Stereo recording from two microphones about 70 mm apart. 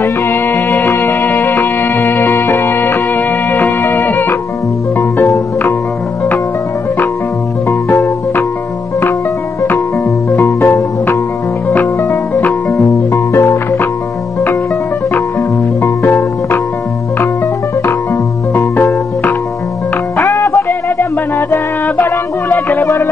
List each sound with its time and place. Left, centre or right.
0.0 s music: left
7.9 s music: left
10.3 s music: left
13.1 s music: left
15.8 s music: left
18.5 s music: left
20.2 s music: left
21.8 s a sound: left